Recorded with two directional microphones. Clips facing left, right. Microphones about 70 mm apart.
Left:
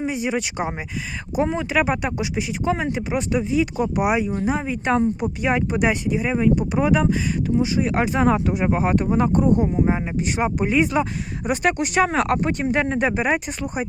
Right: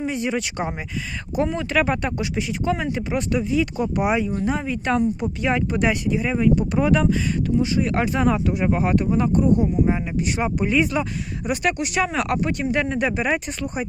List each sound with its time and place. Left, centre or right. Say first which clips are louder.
0.0 s speech: left 1 dB; centre